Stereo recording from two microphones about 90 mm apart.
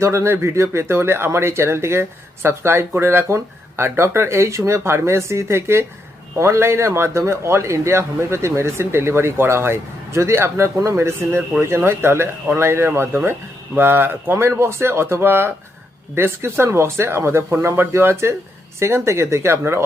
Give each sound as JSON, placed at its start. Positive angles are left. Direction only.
{"t": 0.0, "sound": "a man's voice", "side_deg": -30}